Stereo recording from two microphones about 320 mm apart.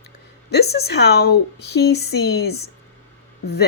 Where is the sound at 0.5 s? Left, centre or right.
Left.